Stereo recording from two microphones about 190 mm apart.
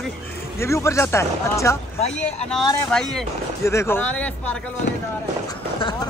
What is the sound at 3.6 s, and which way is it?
Speech, 15° left (ahead or behind).